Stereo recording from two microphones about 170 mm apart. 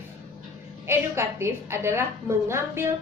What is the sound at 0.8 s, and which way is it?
A woman's voice, 15° right (ahead or behind).